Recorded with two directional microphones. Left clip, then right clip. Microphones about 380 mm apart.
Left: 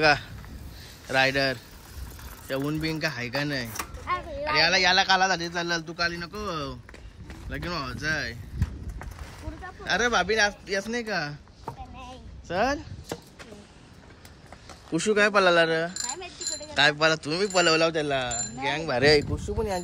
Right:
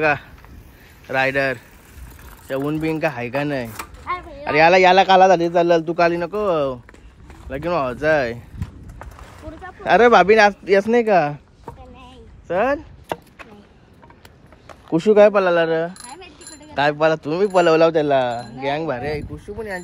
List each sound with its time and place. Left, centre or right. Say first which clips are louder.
0.0 s speech: right 3 dB; centre
9.6 s a man's voice: right 12 dB; centre
12.0 s a sound: even; centre
14.9 s speech: right 10 dB; centre
19.3 s speech: even; centre